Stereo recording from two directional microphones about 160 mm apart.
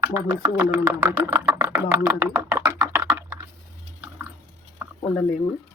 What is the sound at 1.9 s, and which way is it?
Computer keyboard, 15° right (ahead or behind).